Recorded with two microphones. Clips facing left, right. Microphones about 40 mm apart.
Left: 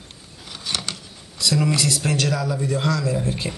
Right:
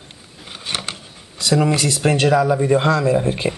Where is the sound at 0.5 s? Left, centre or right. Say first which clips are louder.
Right 2 dB; right.